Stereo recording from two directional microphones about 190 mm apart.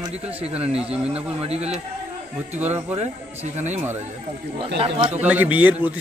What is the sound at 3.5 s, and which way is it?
Speech, 35° right (ahead or behind).